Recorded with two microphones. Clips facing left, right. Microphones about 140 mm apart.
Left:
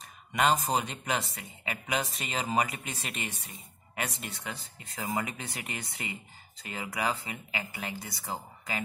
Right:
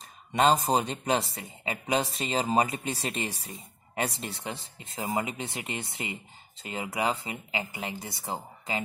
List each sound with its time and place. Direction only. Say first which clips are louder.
0.3 s speech: right 4 dB; 30° right (ahead or behind)